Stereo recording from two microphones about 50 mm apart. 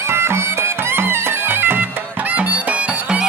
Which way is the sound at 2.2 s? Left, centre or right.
Right.